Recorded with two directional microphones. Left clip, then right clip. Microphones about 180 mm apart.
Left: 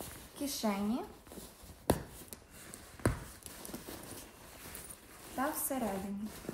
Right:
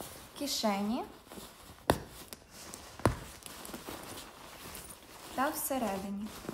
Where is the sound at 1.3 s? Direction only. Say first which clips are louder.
Right 3 dB; 5° right (ahead or behind).